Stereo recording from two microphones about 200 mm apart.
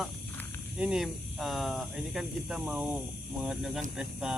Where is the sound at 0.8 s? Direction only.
5° right (ahead or behind).